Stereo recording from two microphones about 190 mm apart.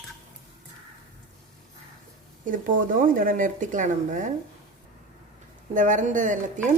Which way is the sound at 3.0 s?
45° right (ahead or behind).